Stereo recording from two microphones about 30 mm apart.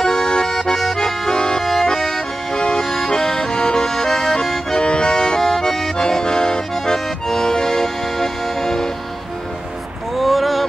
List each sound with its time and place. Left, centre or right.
0.0 s accordion: left
0.7 s accordion: centre
2.5 s accordion: left
2.8 s accordion: centre
6.7 s accordion: centre
10.1 s vehicle: centre